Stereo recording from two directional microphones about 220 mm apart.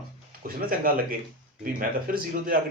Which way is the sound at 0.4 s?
40° right (ahead or behind).